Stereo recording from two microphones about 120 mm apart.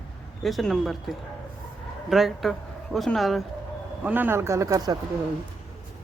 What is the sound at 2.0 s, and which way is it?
Speech, centre (ahead or behind).